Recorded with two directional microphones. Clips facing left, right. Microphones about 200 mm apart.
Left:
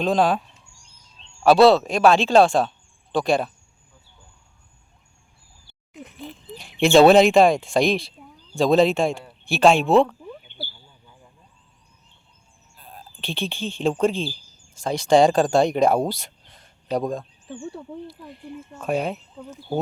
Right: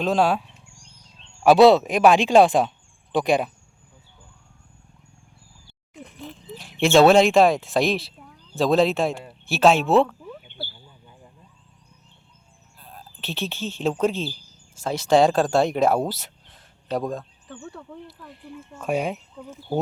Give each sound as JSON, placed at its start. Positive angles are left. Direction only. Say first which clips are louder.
{"t": 0.0, "sound": "speech", "louder": "left 1 dB", "side_deg": -5}
{"t": 1.5, "sound": "speech", "louder": "right 1 dB", "side_deg": -20}
{"t": 6.1, "sound": "speech", "louder": "even", "side_deg": 0}
{"t": 13.2, "sound": "speech", "louder": "left 1 dB", "side_deg": -5}
{"t": 17.5, "sound": "speech", "louder": "left 5 dB", "side_deg": 25}
{"t": 18.3, "sound": "speech", "louder": "left 3 dB", "side_deg": 0}